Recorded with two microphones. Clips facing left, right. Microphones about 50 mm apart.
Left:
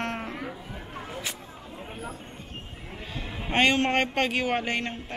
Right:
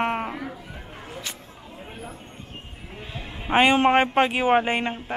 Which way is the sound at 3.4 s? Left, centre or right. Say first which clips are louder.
Right 5 dB; centre.